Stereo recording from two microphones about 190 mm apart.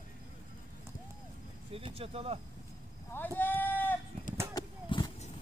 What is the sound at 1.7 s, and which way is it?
Speech, 30° right (ahead or behind).